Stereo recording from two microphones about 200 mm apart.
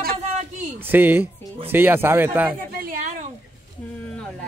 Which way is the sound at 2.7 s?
45° right (ahead or behind).